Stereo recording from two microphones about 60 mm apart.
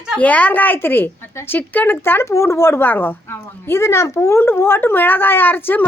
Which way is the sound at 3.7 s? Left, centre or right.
Left.